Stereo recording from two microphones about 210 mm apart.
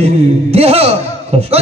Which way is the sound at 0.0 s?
30° right (ahead or behind).